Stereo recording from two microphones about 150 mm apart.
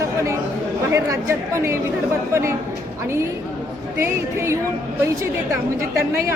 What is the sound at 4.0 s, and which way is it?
Speech, 15° right (ahead or behind).